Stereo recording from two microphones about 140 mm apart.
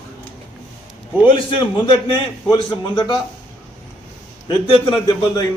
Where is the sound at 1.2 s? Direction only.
35° left (ahead or behind).